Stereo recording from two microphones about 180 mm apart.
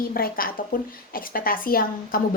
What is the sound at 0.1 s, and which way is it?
A woman's voice, 55° left (ahead or behind).